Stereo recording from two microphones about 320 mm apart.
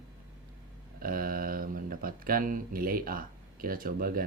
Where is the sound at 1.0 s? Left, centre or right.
Right.